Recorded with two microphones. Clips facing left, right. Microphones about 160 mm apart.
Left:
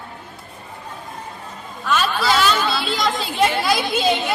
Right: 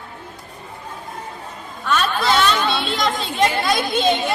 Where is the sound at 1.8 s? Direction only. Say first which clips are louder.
Even; centre (ahead or behind).